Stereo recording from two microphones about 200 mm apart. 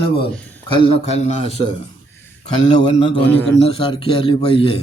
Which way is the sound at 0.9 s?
30° left (ahead or behind).